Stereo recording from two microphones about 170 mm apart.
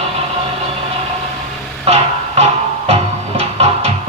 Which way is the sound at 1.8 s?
40° right (ahead or behind).